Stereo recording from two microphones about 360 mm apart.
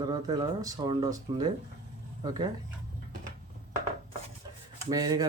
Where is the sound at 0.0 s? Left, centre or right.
Centre.